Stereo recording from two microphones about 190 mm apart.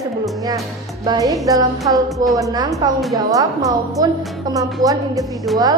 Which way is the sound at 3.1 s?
20° right (ahead or behind).